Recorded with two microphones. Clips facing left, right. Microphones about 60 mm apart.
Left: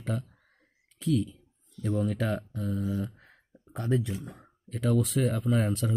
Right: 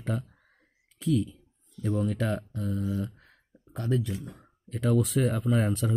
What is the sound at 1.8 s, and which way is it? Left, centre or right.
Speech, centre.